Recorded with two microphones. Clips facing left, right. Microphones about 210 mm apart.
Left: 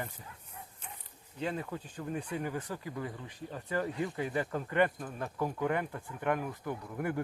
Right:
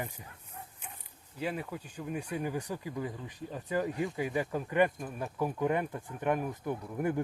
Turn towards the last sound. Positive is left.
turn(degrees=-15)  # may be behind; listen again after turning